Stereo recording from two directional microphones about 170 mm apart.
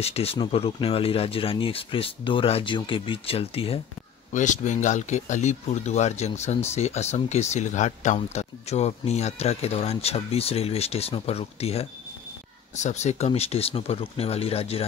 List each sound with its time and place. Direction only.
0.0 s speech: 35° left (ahead or behind)
4.3 s speech: 45° left (ahead or behind)